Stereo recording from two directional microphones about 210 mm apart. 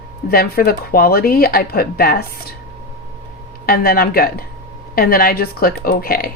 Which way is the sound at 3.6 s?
45° left (ahead or behind).